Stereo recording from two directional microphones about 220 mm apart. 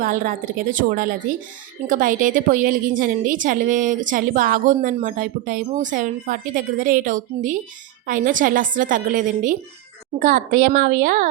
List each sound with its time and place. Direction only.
0.0 s a woman's voice: 40° right (ahead or behind)